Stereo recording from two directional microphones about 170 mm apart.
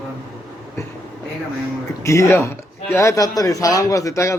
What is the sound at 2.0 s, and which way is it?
Speech, 15° left (ahead or behind).